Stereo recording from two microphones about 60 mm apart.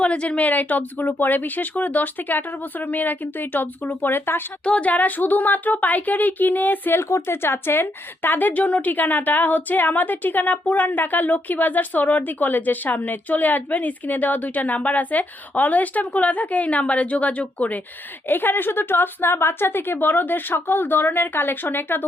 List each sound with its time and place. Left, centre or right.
0.0 s speech: left
4.6 s a woman's voice: left
18.3 s speech: left